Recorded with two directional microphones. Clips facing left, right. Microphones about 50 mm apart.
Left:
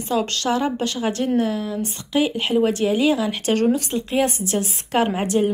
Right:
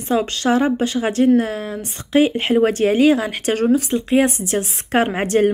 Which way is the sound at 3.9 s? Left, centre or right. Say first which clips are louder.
Right 4 dB; right.